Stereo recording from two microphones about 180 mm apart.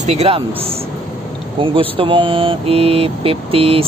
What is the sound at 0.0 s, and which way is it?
Mantra, 35° right (ahead or behind).